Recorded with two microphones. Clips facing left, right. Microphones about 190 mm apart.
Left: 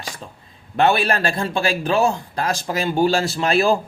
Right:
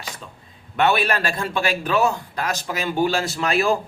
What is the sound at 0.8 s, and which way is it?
A man's voice, 30° left (ahead or behind).